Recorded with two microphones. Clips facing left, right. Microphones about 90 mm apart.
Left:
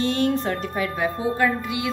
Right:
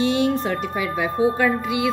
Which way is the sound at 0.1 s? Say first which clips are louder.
Right 2 dB; 15° right (ahead or behind).